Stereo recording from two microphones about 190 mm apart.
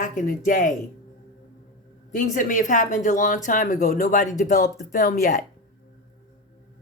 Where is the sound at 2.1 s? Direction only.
40° left (ahead or behind).